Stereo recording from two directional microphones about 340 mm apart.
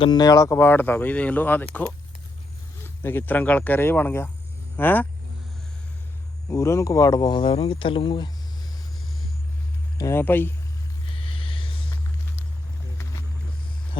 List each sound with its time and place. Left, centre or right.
0.0 s speech: centre
2.8 s speech: centre
6.5 s speech: centre
10.0 s speech: centre
11.1 s a sound: centre
14.0 s speech: centre